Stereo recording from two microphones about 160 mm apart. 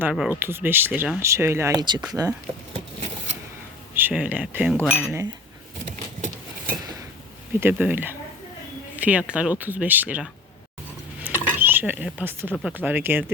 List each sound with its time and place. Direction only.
0.1 s speech: 5° right (ahead or behind)
0.3 s speech: 15° right (ahead or behind)
3.9 s speech: 10° right (ahead or behind)
5.8 s a sound: 50° right (ahead or behind)
7.6 s speech: 10° right (ahead or behind)
11.2 s mechanisms: 15° right (ahead or behind)
12.1 s speech: 10° right (ahead or behind)